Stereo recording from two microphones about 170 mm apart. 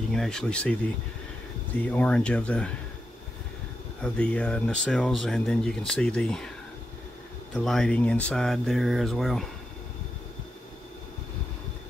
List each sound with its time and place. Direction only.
0.1 s speech: 5° left (ahead or behind)
1.8 s speech: 5° left (ahead or behind)
4.0 s speech: 5° left (ahead or behind)
7.5 s speech: 5° left (ahead or behind)